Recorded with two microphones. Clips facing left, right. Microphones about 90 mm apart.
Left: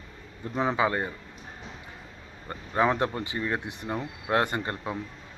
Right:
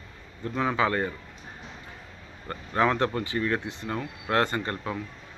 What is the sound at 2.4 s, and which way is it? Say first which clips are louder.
A man's voice: even; 10° left (ahead or behind).